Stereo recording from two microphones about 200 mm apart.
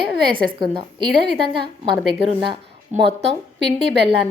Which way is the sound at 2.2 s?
30° right (ahead or behind).